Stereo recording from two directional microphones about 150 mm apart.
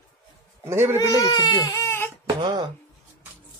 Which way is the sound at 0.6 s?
15° right (ahead or behind).